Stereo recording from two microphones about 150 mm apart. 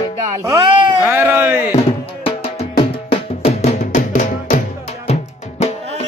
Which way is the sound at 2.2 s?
40° left (ahead or behind).